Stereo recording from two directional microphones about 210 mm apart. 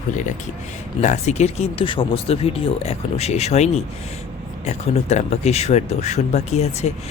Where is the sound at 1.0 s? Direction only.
35° left (ahead or behind).